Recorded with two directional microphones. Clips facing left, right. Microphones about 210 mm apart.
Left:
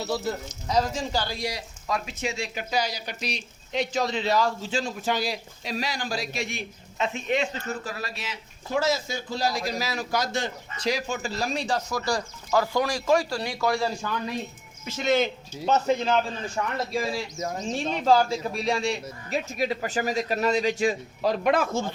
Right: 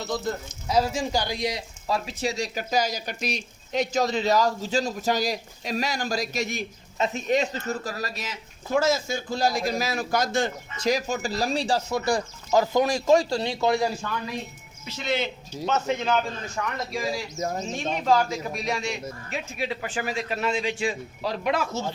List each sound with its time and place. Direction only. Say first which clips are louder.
0.0 s speech: even; 10° left (ahead or behind)
0.7 s speech: right 2 dB; 10° right (ahead or behind)
2.0 s speech: right 3 dB; 35° right (ahead or behind); by 13.9 s 20° right (ahead or behind)
14.8 s a man's voice: left 4 dB; 45° left (ahead or behind)